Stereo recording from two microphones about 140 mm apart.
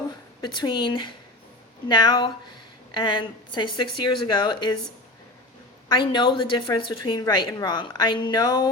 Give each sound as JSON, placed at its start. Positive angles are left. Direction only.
{"t": 0.4, "sound": "a woman's voice", "side_deg": 35}
{"t": 5.9, "sound": "a woman's voice", "side_deg": 35}